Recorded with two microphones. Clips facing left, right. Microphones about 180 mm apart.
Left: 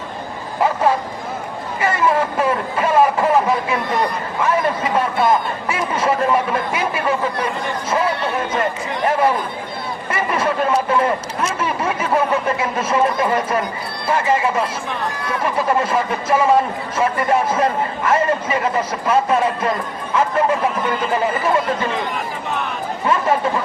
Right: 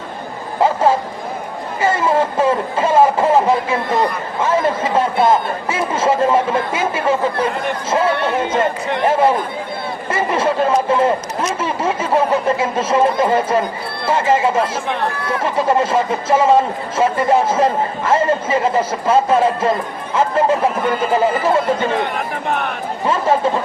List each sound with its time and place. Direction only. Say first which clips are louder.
0.6 s speech: right 3 dB; 25° right (ahead or behind)
23.0 s speech: right 2 dB; 25° right (ahead or behind)